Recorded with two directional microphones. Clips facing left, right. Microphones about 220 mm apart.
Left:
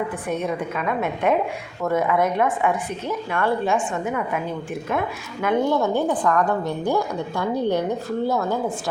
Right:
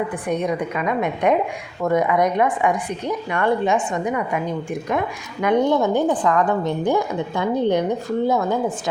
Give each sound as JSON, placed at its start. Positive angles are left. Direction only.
{"t": 0.3, "sound": "a woman's voice", "side_deg": -15}
{"t": 4.0, "sound": "a woman's voice", "side_deg": 0}
{"t": 5.5, "sound": "a woman's voice", "side_deg": -20}